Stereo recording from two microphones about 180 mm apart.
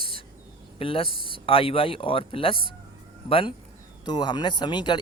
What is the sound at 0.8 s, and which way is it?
Speech, 30° left (ahead or behind).